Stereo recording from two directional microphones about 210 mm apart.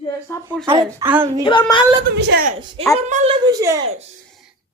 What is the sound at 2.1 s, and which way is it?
Speech, 50° right (ahead or behind).